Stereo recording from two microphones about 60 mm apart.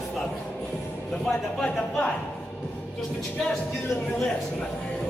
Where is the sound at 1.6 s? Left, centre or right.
Left.